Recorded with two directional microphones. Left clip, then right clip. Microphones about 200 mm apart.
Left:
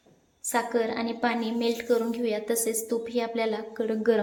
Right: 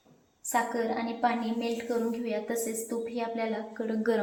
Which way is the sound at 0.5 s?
50° left (ahead or behind).